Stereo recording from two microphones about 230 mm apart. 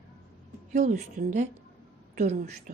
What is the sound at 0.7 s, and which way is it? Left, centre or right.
A woman's voice, right.